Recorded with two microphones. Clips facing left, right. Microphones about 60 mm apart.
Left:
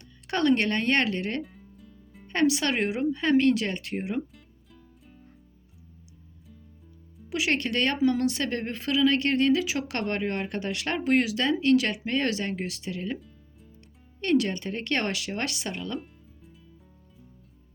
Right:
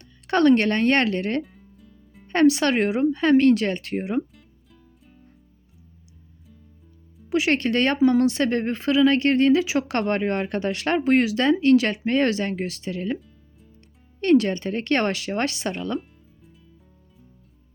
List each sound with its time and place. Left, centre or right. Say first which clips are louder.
0.3 s speech: right 6 dB; right
1.4 s music: right 6 dB; centre
2.2 s speech: right 6 dB; right
7.3 s speech: right 6 dB; right
10.0 s speech: right 6 dB; right
14.2 s speech: right 6 dB; right